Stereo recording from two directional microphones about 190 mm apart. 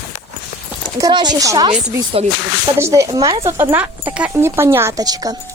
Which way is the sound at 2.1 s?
30° right (ahead or behind).